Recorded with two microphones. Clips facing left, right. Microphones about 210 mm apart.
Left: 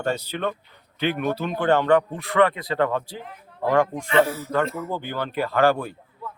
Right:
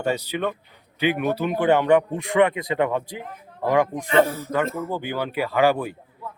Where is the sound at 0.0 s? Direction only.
10° right (ahead or behind).